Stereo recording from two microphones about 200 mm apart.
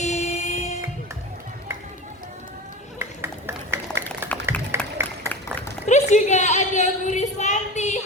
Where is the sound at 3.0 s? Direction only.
10° right (ahead or behind).